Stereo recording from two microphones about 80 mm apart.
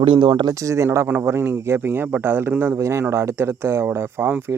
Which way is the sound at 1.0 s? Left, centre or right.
Right.